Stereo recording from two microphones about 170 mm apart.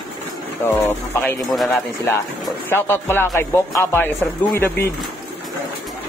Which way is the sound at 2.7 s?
15° left (ahead or behind).